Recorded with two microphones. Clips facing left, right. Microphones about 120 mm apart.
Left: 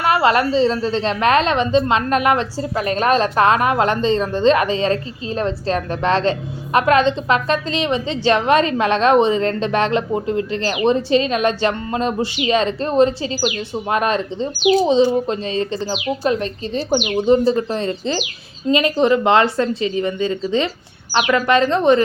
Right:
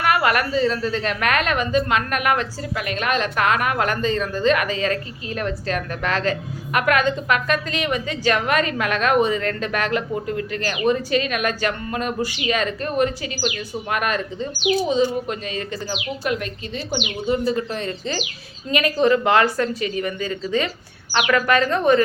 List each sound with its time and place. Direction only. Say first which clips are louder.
0.0 s a woman's voice: left 4 dB; 25° left (ahead or behind)
16.9 s speech: left 8 dB; 45° left (ahead or behind)
17.2 s a woman's voice: left 6 dB; 30° left (ahead or behind)